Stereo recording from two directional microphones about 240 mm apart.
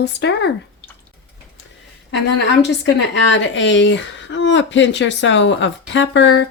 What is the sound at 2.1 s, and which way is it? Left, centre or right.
A woman's voice, left.